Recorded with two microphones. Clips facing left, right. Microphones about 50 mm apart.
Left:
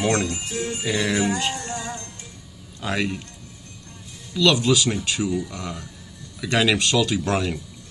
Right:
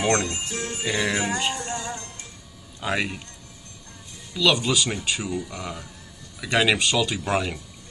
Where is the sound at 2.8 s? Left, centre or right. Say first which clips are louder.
Left 1 dB; centre.